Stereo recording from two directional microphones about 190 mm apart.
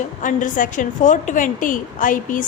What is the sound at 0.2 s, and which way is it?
A woman's voice, 40° left (ahead or behind).